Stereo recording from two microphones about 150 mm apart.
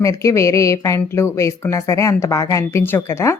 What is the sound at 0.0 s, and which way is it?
A woman's voice, 20° left (ahead or behind).